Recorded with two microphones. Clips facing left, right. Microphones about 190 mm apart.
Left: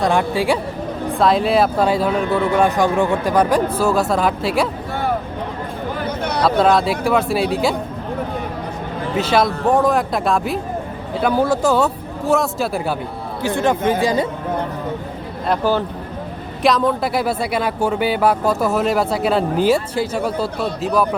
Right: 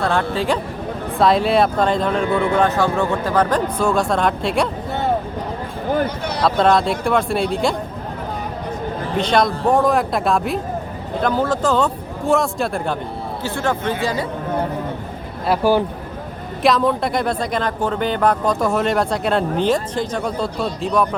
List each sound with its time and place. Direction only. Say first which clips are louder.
0.0 s a man's voice: left 2 dB; 15° left (ahead or behind)
1.2 s speech: even; centre (ahead or behind)
6.4 s speech: left 1 dB; centre (ahead or behind)
9.1 s speech: left 1 dB; 5° left (ahead or behind)
11.2 s a man's voice: left 2 dB; 10° left (ahead or behind)
13.4 s a man's voice: left 5 dB; 15° left (ahead or behind)
15.4 s speech: right 2 dB; 10° right (ahead or behind)
16.6 s speech: even; centre (ahead or behind)